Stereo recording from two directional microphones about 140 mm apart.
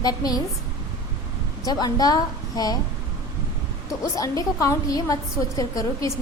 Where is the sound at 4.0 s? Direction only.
25° left (ahead or behind).